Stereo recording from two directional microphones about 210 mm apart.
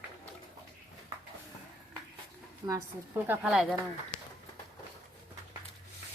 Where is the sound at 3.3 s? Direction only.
5° right (ahead or behind).